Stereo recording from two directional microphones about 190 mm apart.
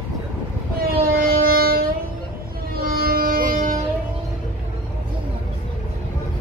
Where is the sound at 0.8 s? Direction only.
50° right (ahead or behind).